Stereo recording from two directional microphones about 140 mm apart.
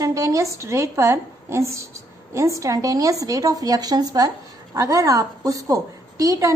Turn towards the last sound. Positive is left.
turn(degrees=-25)  # may be behind; listen again after turning